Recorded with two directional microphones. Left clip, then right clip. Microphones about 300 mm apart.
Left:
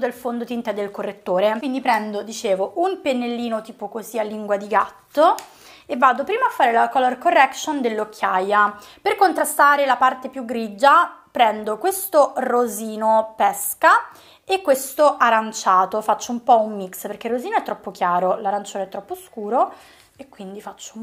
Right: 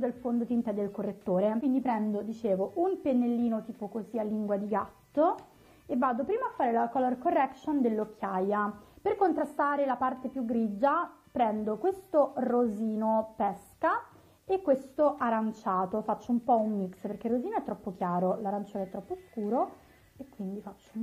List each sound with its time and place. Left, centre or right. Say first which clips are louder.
0.0 s a woman's voice: left 8 dB; centre
16.5 s a woman's voice: left 11 dB; centre